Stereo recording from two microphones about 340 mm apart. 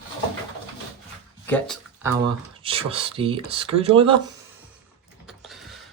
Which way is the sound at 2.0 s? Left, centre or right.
Centre.